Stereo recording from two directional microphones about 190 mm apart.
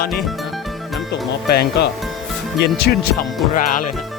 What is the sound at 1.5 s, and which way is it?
Speech, 55° left (ahead or behind).